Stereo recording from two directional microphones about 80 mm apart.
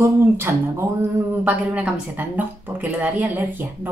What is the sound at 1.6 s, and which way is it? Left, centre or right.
A woman's voice, centre.